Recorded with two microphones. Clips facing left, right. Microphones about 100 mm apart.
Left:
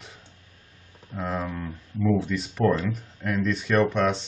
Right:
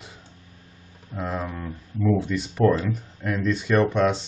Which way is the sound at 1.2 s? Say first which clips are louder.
Even; 5° right (ahead or behind).